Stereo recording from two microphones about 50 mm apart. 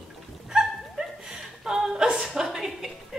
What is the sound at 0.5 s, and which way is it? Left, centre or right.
Dog, centre.